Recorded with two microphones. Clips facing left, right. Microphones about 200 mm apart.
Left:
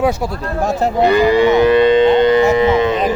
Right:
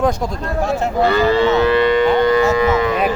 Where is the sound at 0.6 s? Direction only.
40° left (ahead or behind).